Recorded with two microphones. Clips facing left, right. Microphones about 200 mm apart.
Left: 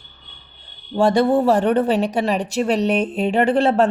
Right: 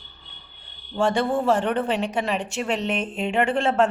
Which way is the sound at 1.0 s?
40° left (ahead or behind).